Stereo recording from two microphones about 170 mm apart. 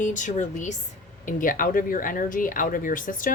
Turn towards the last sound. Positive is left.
turn(degrees=50)  # may be behind; listen again after turning